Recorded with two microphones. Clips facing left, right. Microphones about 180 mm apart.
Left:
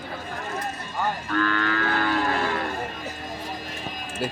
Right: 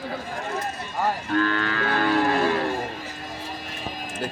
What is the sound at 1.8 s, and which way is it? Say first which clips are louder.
Music: right 6 dB; 35° right (ahead or behind).